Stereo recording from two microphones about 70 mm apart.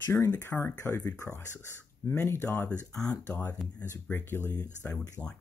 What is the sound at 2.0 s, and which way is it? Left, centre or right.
Speech, left.